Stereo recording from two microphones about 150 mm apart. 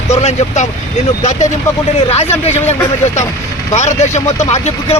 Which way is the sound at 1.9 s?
45° left (ahead or behind).